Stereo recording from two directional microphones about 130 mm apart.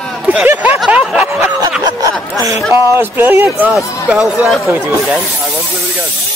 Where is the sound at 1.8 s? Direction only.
30° right (ahead or behind).